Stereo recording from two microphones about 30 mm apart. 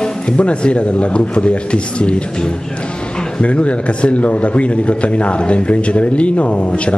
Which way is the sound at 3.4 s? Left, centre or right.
Left.